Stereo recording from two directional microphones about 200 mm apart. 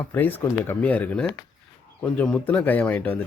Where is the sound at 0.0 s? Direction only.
10° left (ahead or behind).